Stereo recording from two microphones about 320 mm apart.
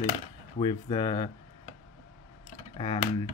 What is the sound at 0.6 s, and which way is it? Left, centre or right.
Speech, centre.